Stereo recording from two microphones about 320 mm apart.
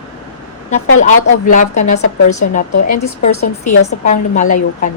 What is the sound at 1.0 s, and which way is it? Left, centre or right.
A woman's voice, left.